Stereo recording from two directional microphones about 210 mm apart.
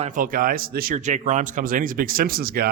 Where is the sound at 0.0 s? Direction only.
40° right (ahead or behind).